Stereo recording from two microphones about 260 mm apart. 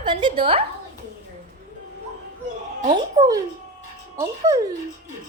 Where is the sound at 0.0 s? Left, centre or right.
Centre.